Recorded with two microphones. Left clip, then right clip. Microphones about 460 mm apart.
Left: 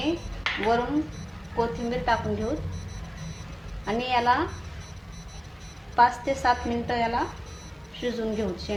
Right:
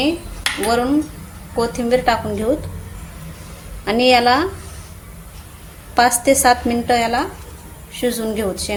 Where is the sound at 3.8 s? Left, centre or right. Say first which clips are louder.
Right 10 dB; centre.